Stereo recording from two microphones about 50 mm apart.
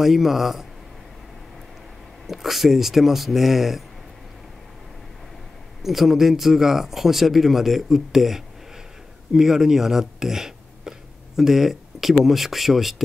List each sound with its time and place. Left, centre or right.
0.0 s speech: centre
2.2 s speech: centre
5.8 s speech: centre